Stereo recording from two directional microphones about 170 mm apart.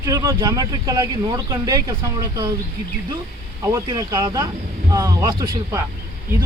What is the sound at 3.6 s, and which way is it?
Speech, 20° right (ahead or behind).